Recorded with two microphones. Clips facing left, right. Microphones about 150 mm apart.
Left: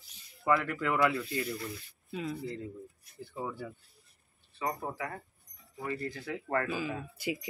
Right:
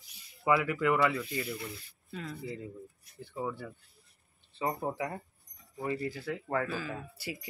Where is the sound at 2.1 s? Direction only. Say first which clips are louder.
Left 5 dB; 10° left (ahead or behind).